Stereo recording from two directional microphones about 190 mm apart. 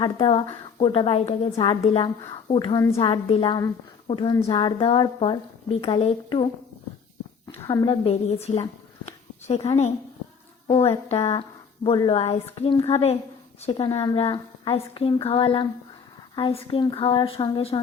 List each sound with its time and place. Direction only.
0.0 s speech: 25° left (ahead or behind)
7.6 s speech: 20° left (ahead or behind)
9.6 s speech: 35° left (ahead or behind)